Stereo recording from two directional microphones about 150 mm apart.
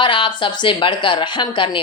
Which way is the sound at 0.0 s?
30° left (ahead or behind).